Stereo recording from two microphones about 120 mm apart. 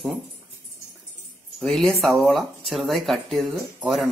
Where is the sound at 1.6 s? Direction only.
5° left (ahead or behind).